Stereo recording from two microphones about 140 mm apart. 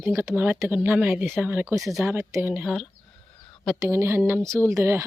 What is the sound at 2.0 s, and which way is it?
Speech, 20° right (ahead or behind).